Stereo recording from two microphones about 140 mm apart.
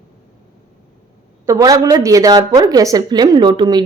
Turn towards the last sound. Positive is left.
turn(degrees=-35)  # may be behind; listen again after turning